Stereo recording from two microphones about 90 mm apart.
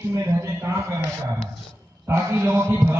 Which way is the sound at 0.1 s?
30° right (ahead or behind).